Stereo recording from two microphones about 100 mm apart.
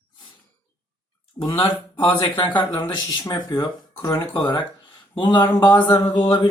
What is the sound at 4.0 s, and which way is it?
Speech, 25° left (ahead or behind).